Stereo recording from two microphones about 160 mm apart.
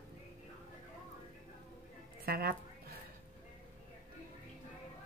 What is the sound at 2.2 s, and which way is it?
Speech, 70° right (ahead or behind).